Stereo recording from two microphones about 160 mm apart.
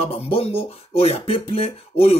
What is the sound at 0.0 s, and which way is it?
Speech, 35° left (ahead or behind).